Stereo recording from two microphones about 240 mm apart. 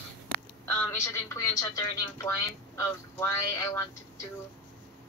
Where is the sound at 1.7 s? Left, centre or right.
Centre.